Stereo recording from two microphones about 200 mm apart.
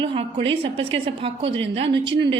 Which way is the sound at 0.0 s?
25° right (ahead or behind).